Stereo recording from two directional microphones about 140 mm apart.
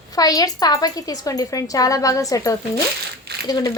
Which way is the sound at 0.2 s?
25° left (ahead or behind).